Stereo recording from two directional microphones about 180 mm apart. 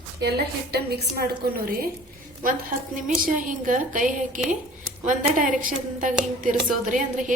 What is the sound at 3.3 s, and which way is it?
A woman's voice, 45° right (ahead or behind).